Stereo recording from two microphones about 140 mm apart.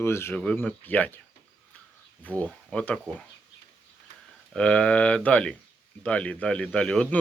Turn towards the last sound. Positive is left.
turn(degrees=5)  # may be behind; listen again after turning